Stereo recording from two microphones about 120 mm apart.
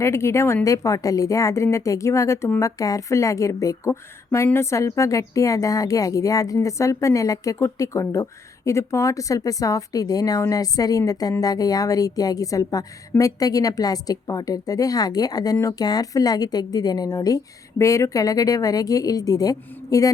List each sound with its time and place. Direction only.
0.0 s a woman's voice: 20° left (ahead or behind)